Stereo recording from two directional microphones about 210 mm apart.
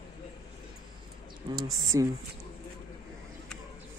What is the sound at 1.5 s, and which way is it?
Speech, 15° right (ahead or behind).